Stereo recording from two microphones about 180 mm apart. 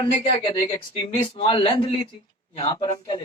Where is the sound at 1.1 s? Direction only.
40° left (ahead or behind).